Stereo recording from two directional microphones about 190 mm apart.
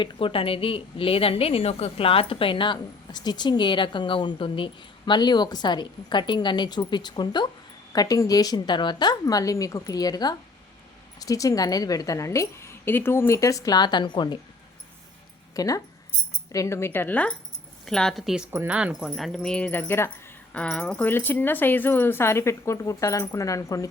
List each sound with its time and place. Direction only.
0.0 s a woman's voice: 25° left (ahead or behind)
15.5 s a woman's voice: 20° left (ahead or behind)